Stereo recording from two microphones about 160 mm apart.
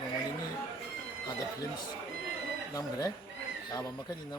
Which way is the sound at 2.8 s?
25° left (ahead or behind).